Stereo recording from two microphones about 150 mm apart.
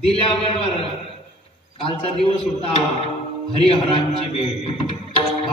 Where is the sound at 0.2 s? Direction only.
40° left (ahead or behind).